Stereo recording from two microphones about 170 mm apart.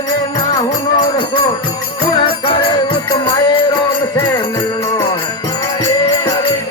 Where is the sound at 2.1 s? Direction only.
30° left (ahead or behind).